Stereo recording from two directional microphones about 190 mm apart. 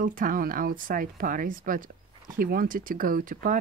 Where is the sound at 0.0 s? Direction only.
45° right (ahead or behind).